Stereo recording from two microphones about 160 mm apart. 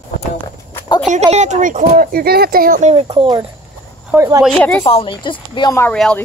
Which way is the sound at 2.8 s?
40° right (ahead or behind).